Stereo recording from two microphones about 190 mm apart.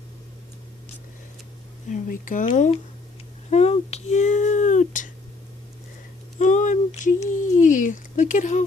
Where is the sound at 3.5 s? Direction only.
35° left (ahead or behind).